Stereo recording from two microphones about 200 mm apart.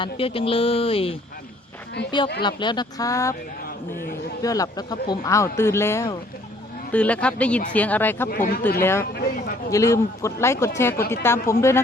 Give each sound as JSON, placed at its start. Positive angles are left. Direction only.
{"t": 0.0, "sound": "speech", "side_deg": 30}
{"t": 4.4, "sound": "speech", "side_deg": 15}
{"t": 8.3, "sound": "speech", "side_deg": 45}
{"t": 8.8, "sound": "speech", "side_deg": 10}
{"t": 9.1, "sound": "speech", "side_deg": 50}
{"t": 9.7, "sound": "speech", "side_deg": 15}